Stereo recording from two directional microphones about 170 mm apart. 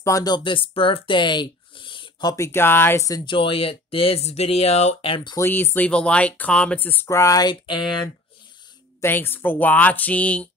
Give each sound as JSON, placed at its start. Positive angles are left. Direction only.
{"t": 0.0, "sound": "speech", "side_deg": 20}
{"t": 5.4, "sound": "speech", "side_deg": 15}
{"t": 9.0, "sound": "speech", "side_deg": 15}